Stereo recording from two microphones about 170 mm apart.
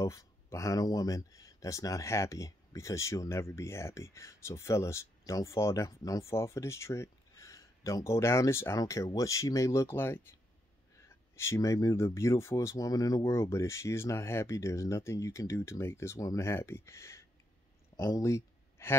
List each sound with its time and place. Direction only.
0.0 s speech: 20° left (ahead or behind)
11.3 s speech: 15° left (ahead or behind)